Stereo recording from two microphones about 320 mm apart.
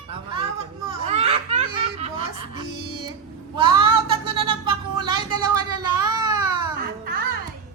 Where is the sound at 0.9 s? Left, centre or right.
Centre.